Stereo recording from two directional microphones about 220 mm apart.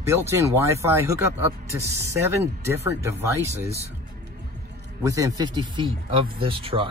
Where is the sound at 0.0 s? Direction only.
15° right (ahead or behind).